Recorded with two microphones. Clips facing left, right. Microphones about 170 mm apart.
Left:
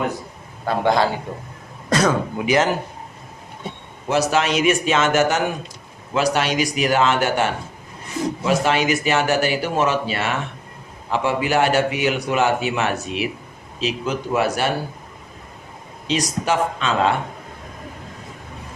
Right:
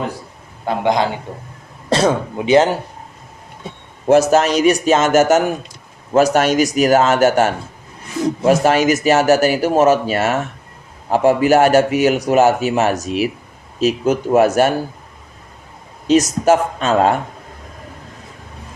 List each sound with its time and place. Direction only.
0.6 s speech: 20° right (ahead or behind)
4.0 s a man's voice: 45° right (ahead or behind)
16.0 s a man's voice: 45° right (ahead or behind)